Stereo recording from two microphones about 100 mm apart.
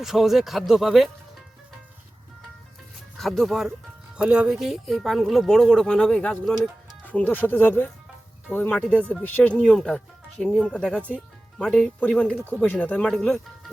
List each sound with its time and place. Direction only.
0.0 s speech: 5° right (ahead or behind)
3.2 s speech: centre (ahead or behind)